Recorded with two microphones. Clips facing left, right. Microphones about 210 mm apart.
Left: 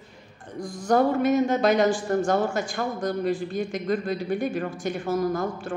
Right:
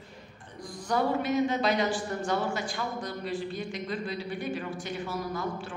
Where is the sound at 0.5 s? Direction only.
45° left (ahead or behind).